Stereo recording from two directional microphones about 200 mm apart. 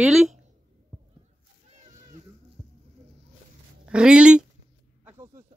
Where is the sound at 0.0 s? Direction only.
Centre (ahead or behind).